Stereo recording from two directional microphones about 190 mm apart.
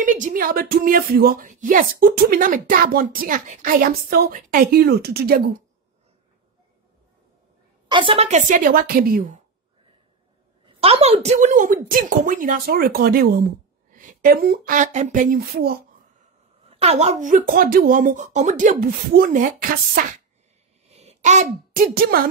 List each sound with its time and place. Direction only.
0.0 s speech: 45° right (ahead or behind)
7.9 s speech: 25° right (ahead or behind); by 9.4 s 50° right (ahead or behind)
10.6 s a woman's voice: 30° right (ahead or behind); by 15.8 s 55° right (ahead or behind)
16.6 s speech: 35° right (ahead or behind)
20.9 s a sound: 35° right (ahead or behind)
21.9 s speech: 50° right (ahead or behind)